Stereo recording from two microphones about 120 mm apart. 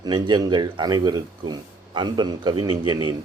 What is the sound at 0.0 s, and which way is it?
Speech, 35° right (ahead or behind).